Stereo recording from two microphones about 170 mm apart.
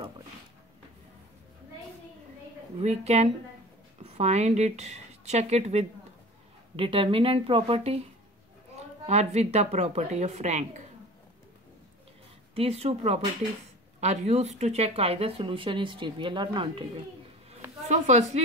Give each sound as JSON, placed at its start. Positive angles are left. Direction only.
{"t": 2.8, "sound": "speech", "side_deg": -40}
{"t": 9.0, "sound": "speech", "side_deg": -40}
{"t": 12.5, "sound": "speech", "side_deg": -35}
{"t": 17.8, "sound": "a woman's voice", "side_deg": -45}